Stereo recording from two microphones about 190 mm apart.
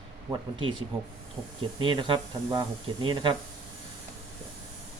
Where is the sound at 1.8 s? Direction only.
25° right (ahead or behind).